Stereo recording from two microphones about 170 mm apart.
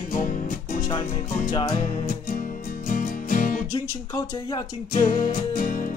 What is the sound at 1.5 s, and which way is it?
Music, 25° left (ahead or behind).